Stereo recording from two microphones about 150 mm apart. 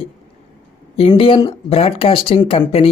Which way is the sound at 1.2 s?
35° left (ahead or behind).